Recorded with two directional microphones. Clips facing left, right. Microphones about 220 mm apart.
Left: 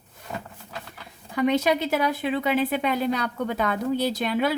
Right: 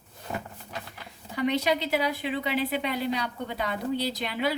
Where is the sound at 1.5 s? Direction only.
50° left (ahead or behind).